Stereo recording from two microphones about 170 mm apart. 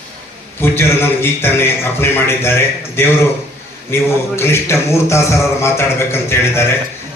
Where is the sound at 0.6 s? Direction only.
15° left (ahead or behind).